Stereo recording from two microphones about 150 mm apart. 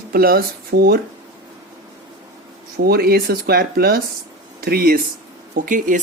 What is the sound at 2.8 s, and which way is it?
Speech, 90° right.